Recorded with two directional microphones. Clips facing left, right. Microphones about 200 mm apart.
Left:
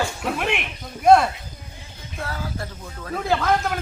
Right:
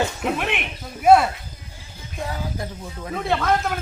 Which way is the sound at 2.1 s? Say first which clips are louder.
Right 1 dB; 15° right (ahead or behind).